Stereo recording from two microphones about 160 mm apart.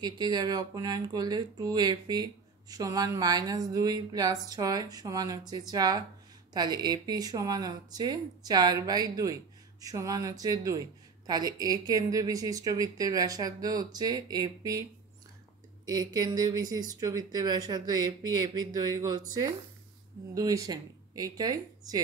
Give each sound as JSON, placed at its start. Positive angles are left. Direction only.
{"t": 0.0, "sound": "speech", "side_deg": -25}
{"t": 20.3, "sound": "speech", "side_deg": -20}